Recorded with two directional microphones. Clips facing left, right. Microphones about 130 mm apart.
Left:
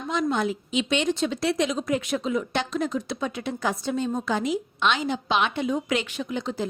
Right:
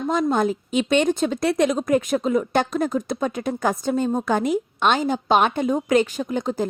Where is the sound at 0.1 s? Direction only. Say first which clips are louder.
Right 4 dB; 45° right (ahead or behind).